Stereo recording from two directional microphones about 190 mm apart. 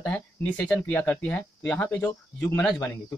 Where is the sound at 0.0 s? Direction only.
5° left (ahead or behind).